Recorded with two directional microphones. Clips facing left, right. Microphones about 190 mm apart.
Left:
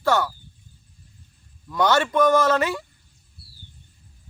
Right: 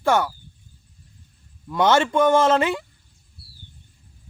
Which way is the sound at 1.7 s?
25° right (ahead or behind).